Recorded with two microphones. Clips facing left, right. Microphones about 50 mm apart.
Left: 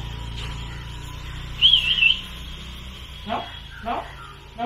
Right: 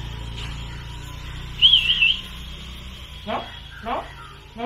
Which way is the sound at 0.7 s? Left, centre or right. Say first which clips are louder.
Even; centre.